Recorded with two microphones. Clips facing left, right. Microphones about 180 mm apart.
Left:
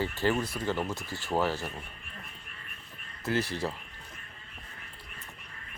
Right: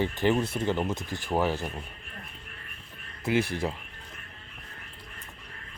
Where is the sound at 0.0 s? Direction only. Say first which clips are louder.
Right 3 dB; 20° right (ahead or behind).